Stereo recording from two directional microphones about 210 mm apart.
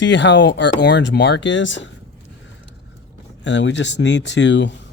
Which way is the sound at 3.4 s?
60° left (ahead or behind).